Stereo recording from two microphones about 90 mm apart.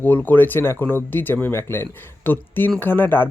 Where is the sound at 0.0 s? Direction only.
20° left (ahead or behind).